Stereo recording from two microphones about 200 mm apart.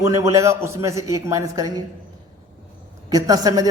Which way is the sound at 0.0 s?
15° right (ahead or behind).